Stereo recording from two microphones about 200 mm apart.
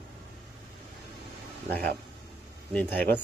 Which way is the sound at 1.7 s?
50° right (ahead or behind).